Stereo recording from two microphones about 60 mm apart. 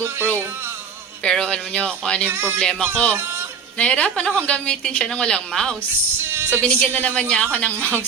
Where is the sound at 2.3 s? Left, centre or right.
Right.